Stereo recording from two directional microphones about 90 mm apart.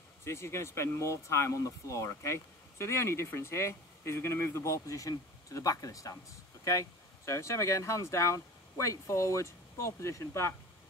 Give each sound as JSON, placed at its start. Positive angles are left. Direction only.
{"t": 0.2, "sound": "speech", "side_deg": 30}